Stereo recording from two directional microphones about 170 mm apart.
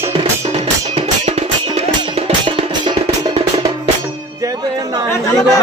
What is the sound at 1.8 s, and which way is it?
Music, 35° right (ahead or behind).